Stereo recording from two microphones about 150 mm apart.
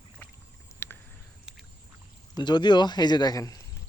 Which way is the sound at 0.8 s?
15° left (ahead or behind).